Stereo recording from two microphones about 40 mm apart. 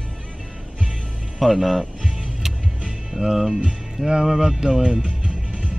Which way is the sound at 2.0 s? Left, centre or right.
Centre.